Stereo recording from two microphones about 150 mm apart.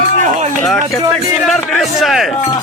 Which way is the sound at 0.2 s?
50° right (ahead or behind).